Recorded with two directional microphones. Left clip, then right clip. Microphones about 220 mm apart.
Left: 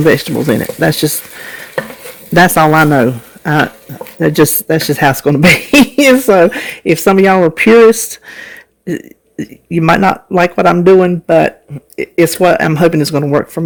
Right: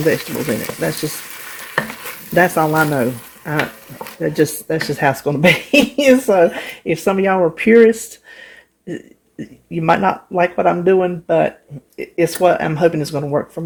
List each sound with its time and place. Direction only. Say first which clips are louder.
0.8 s speech: left 9 dB; 55° left (ahead or behind)
2.3 s speech: left 7 dB; 55° left (ahead or behind)